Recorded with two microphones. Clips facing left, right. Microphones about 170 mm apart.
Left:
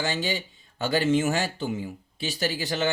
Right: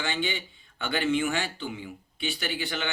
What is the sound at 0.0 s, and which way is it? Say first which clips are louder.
Speech: left 3 dB; 40° left (ahead or behind).